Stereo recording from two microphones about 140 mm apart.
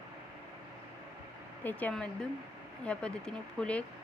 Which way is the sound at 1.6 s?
10° left (ahead or behind).